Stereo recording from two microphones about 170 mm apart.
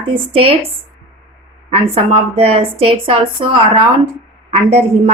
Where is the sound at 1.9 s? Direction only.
35° right (ahead or behind).